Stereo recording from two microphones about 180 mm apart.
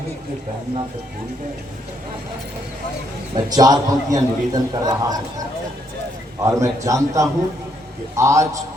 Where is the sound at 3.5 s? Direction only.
20° right (ahead or behind).